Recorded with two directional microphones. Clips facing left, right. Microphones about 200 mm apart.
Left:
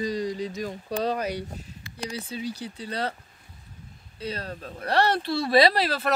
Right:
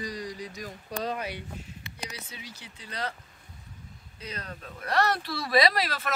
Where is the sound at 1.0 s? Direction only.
40° left (ahead or behind).